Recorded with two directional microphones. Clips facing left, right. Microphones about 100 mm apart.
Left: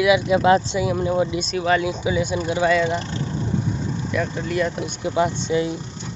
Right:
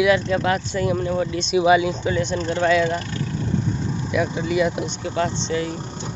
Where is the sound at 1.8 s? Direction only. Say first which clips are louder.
Even; 5° left (ahead or behind).